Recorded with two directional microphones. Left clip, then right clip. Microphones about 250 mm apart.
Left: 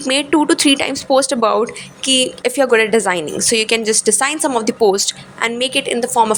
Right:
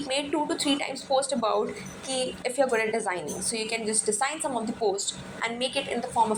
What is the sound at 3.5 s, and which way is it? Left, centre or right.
Speech, left.